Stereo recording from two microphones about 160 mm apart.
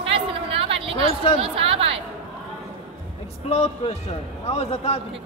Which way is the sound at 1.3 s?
35° right (ahead or behind).